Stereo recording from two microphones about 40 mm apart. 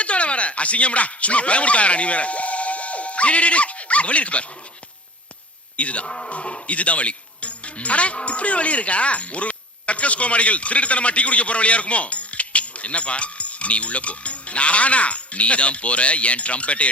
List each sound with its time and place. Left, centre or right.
0.0 s speech: left
5.7 s speech: left